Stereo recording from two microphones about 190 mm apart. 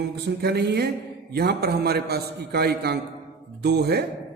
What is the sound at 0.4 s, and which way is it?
A man's voice, 60° right (ahead or behind).